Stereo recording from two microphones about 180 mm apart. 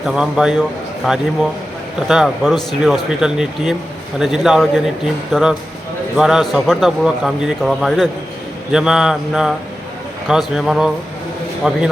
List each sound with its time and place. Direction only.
0.0 s a man's voice: 5° right (ahead or behind)